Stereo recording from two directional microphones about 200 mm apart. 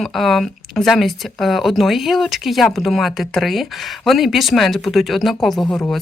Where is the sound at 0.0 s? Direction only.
Centre (ahead or behind).